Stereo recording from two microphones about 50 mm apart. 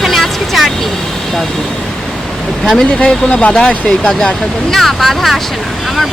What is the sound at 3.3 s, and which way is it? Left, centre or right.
Speech, left.